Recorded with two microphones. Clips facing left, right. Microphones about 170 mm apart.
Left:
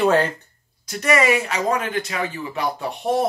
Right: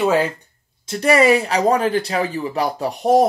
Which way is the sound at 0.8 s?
30° right (ahead or behind).